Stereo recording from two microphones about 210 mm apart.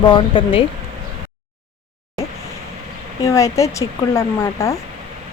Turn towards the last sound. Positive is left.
turn(degrees=15)  # may be behind; listen again after turning